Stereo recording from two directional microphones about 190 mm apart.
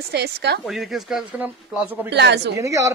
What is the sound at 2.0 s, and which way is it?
Speech, 65° right (ahead or behind).